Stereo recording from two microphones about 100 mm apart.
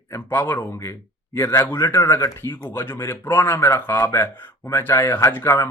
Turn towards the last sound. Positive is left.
turn(degrees=25)  # may be behind; listen again after turning